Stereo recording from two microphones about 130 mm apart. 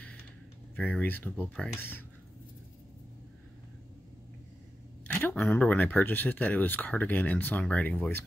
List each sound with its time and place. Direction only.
0.7 s speech: 10° left (ahead or behind)
5.0 s speech: 15° left (ahead or behind)